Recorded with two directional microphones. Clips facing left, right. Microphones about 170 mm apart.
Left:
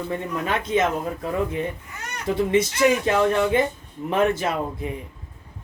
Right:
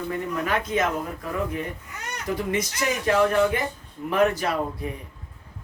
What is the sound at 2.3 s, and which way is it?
A man's voice, 25° left (ahead or behind).